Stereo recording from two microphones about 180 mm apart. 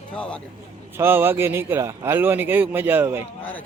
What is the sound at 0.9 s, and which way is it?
Speech, 10° right (ahead or behind).